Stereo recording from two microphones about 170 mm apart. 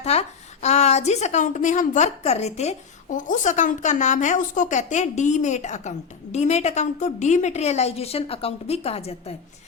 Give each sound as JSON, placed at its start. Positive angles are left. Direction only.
{"t": 0.0, "sound": "a woman's voice", "side_deg": 40}